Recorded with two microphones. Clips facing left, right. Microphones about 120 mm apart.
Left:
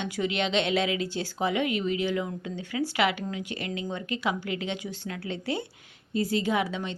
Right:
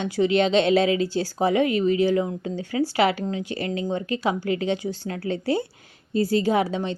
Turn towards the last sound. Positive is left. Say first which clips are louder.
# right 6 dB
turn(degrees=-35)  # may be behind; listen again after turning